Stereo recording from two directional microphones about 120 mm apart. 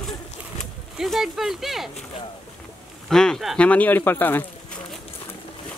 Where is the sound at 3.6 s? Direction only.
10° left (ahead or behind).